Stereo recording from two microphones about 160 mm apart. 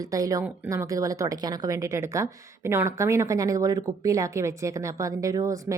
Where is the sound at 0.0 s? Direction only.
20° right (ahead or behind).